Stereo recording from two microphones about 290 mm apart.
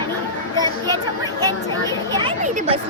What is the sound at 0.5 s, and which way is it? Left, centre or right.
Speech, centre.